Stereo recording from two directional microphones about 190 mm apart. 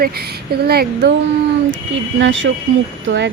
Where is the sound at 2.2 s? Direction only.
80° right.